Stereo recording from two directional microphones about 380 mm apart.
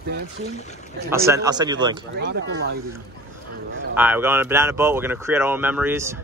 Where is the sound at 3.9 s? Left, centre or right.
Centre.